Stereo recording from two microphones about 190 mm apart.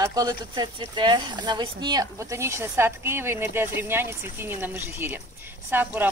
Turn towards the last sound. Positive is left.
turn(degrees=-10)  # may be behind; listen again after turning